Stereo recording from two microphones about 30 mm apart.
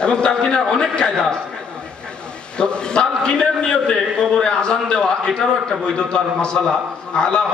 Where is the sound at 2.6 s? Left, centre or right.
Left.